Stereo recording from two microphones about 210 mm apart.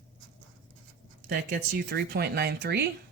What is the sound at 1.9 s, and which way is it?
Speech, 50° right (ahead or behind).